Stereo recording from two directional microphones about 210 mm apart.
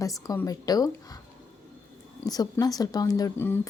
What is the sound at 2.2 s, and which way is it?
A woman's voice, 20° left (ahead or behind).